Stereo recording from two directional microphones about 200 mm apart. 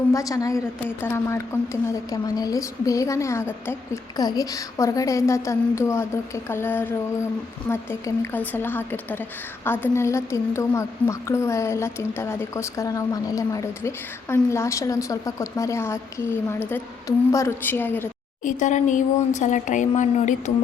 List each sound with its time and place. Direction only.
0.1 s a woman's voice: 15° left (ahead or behind)
18.4 s speech: 40° left (ahead or behind)